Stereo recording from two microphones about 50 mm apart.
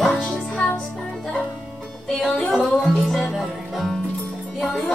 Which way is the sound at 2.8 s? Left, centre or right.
Centre.